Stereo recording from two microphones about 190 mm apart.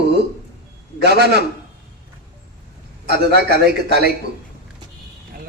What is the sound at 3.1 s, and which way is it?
Speech, 60° right (ahead or behind).